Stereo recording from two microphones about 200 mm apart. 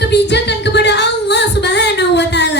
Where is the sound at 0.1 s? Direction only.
60° left (ahead or behind).